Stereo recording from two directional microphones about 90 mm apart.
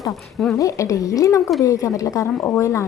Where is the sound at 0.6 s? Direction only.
35° left (ahead or behind).